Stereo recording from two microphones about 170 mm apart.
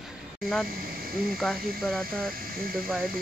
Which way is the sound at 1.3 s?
Centre (ahead or behind).